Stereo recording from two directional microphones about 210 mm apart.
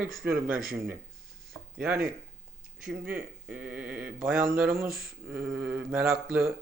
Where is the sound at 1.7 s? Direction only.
5° right (ahead or behind).